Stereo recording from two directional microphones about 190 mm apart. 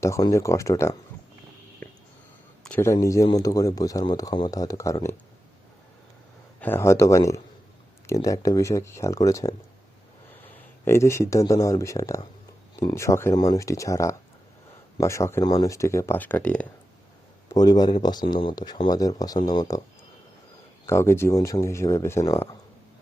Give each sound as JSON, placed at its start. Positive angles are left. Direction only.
{"t": 0.0, "sound": "speech", "side_deg": 15}
{"t": 2.6, "sound": "speech", "side_deg": 10}
{"t": 6.6, "sound": "speech", "side_deg": 10}
{"t": 10.8, "sound": "speech", "side_deg": 15}
{"t": 17.5, "sound": "speech", "side_deg": 20}
{"t": 20.8, "sound": "speech", "side_deg": 15}